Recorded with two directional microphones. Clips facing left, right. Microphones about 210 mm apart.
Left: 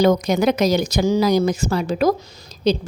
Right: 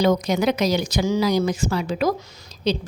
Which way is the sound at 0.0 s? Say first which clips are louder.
Left 3 dB; 45° left (ahead or behind).